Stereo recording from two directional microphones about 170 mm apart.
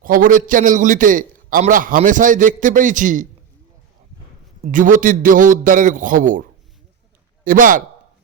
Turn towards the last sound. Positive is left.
turn(degrees=-50)  # may be behind; listen again after turning